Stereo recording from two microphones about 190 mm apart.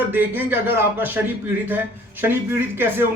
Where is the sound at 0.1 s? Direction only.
10° right (ahead or behind).